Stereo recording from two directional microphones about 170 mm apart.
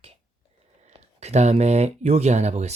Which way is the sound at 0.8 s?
40° right (ahead or behind).